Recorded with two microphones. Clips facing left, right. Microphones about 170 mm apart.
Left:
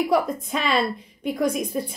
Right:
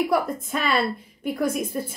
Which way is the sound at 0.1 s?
5° right (ahead or behind).